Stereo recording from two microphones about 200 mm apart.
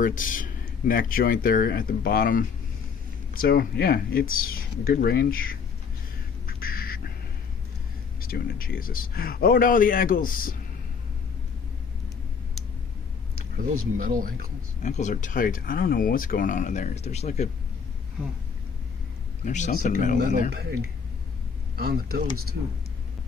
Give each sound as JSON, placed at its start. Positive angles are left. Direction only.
{"t": 0.0, "sound": "speech", "side_deg": 40}
{"t": 6.4, "sound": "duck", "side_deg": 45}
{"t": 8.2, "sound": "speech", "side_deg": 45}
{"t": 13.9, "sound": "speech", "side_deg": -45}
{"t": 14.8, "sound": "speech", "side_deg": 35}
{"t": 19.4, "sound": "speech", "side_deg": 35}
{"t": 20.5, "sound": "speech", "side_deg": -50}